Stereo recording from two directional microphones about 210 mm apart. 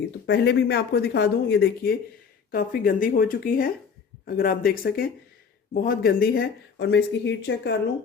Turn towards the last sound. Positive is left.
turn(degrees=55)  # may be behind; listen again after turning